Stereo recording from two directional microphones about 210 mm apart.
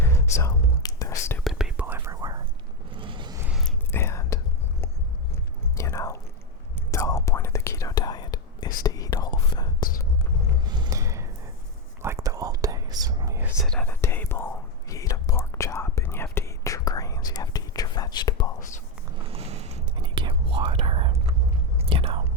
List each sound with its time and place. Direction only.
0.0 s whispering: 15° left (ahead or behind)
1.5 s whispering: 5° right (ahead or behind)
2.9 s vehicle: 25° right (ahead or behind)
3.4 s whispering: centre (ahead or behind)
3.9 s whispering: 15° left (ahead or behind)
5.7 s whispering: 15° left (ahead or behind)
10.7 s a sound: 20° right (ahead or behind)
12.0 s whispering: 15° right (ahead or behind)
13.6 s whispering: 5° left (ahead or behind)
19.2 s whispering: 30° right (ahead or behind)